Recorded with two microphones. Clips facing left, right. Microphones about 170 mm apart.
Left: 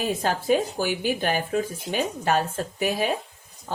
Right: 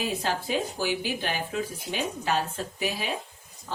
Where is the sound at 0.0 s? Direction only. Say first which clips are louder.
Left 4 dB; 50° left (ahead or behind).